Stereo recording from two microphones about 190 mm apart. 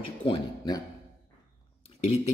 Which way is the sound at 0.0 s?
25° left (ahead or behind).